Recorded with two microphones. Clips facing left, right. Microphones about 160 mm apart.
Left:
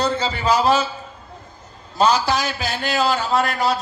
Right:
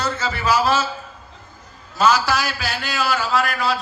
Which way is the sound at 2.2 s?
20° left (ahead or behind).